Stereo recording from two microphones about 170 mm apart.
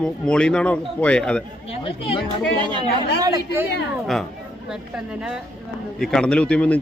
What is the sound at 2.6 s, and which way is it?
Speech, 30° right (ahead or behind).